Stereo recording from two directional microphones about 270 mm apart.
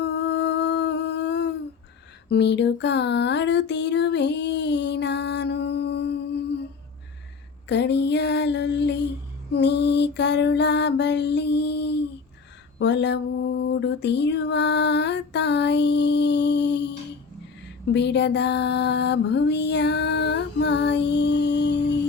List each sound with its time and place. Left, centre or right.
0.0 s humming: left
2.3 s a sound: left
7.7 s mantra: left
17.9 s mantra: left